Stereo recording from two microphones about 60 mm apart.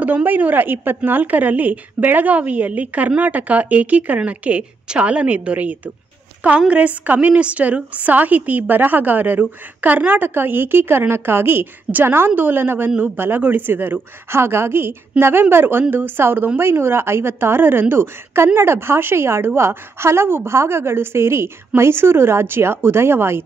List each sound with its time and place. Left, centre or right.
0.0 s a woman's voice: right